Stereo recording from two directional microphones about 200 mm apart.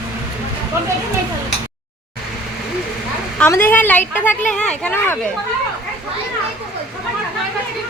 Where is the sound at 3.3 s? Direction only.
10° left (ahead or behind).